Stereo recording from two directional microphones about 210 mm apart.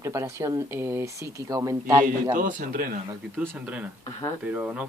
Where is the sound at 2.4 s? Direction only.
40° right (ahead or behind).